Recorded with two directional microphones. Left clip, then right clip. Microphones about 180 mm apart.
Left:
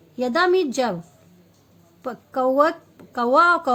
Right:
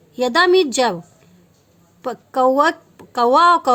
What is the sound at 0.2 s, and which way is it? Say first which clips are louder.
Speech: right 5 dB; 45° right (ahead or behind).